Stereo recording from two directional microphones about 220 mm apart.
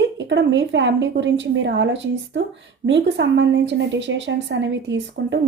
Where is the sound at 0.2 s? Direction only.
55° right (ahead or behind).